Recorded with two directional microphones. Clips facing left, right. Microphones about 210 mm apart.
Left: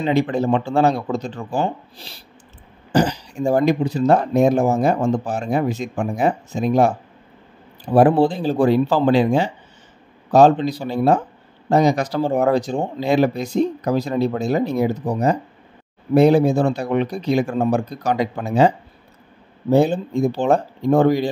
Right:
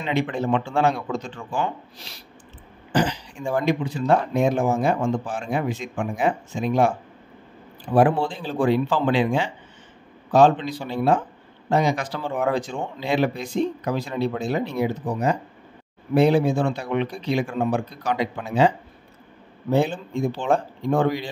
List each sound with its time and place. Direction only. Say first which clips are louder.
0.0 s speech: left 6 dB; 35° left (ahead or behind)
19.7 s speech: left 6 dB; 40° left (ahead or behind)